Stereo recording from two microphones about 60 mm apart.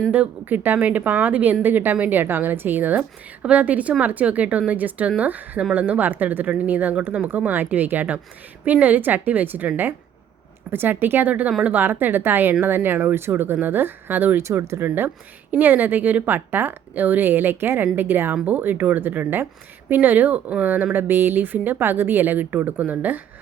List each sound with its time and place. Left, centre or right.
0.1 s speech: right
10.7 s speech: right
14.3 s speech: right